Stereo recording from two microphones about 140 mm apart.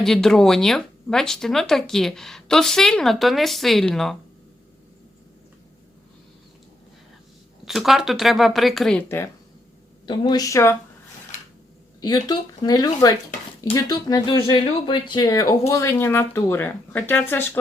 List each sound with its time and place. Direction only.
0.0 s speech: 5° left (ahead or behind)
7.6 s speech: centre (ahead or behind)
9.0 s speech: 15° left (ahead or behind)
10.1 s speech: 30° left (ahead or behind)
12.0 s speech: 30° left (ahead or behind)